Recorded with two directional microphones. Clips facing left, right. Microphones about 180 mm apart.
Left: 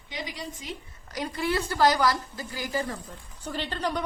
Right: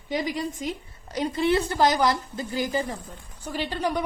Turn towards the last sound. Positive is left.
turn(degrees=-10)  # may be behind; listen again after turning